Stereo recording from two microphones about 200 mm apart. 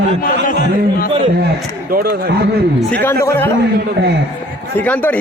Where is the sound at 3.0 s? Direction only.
15° left (ahead or behind).